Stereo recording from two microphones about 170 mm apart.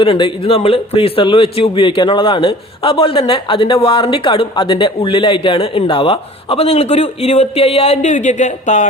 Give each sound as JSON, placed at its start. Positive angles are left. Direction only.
{"t": 0.0, "sound": "a man's voice", "side_deg": 30}